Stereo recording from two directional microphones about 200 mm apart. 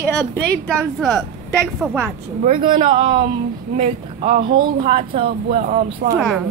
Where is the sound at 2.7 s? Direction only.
25° right (ahead or behind).